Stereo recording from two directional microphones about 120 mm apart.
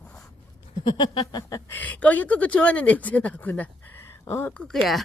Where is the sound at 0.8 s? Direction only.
40° left (ahead or behind).